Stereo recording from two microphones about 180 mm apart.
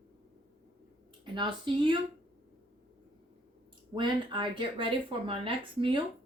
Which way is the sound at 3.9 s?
25° right (ahead or behind).